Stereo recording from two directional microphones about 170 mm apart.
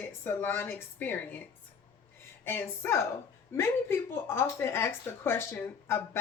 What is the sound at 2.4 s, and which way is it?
Speech, 15° left (ahead or behind).